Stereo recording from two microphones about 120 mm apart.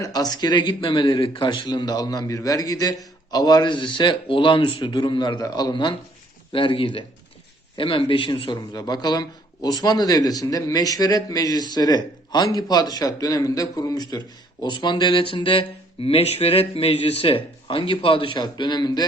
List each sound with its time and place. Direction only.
0.0 s a man's voice: 35° left (ahead or behind)